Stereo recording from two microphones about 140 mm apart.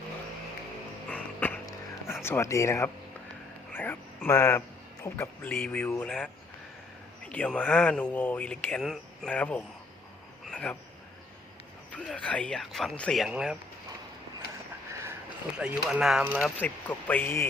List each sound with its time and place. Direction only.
1.1 s a sound: 10° left (ahead or behind)
2.2 s a man's voice: 20° left (ahead or behind)
7.3 s speech: 10° left (ahead or behind)
11.9 s speech: 10° left (ahead or behind)
15.5 s speech: 5° right (ahead or behind)
16.6 s speech: 10° left (ahead or behind)